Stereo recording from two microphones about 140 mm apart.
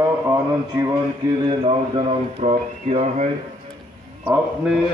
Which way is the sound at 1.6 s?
45° right (ahead or behind).